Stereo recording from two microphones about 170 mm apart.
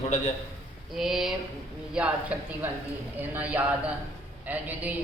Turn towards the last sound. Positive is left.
turn(degrees=-10)  # may be behind; listen again after turning